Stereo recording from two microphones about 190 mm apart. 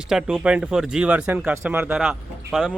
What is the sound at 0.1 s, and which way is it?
Speech, 5° right (ahead or behind).